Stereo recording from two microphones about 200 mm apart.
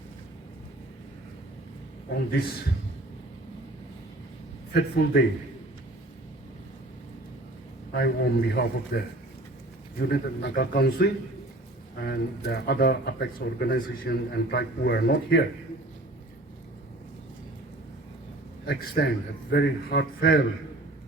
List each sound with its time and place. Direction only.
2.0 s a man's voice: 55° left (ahead or behind)
4.7 s a man's voice: 55° left (ahead or behind)
7.9 s speech: 55° left (ahead or behind)
10.0 s a man's voice: 55° left (ahead or behind)
18.6 s a man's voice: 50° left (ahead or behind)